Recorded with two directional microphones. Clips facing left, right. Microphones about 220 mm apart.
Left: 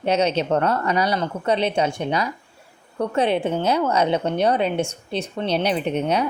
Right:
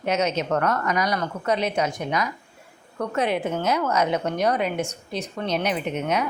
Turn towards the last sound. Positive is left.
turn(degrees=30)  # may be behind; listen again after turning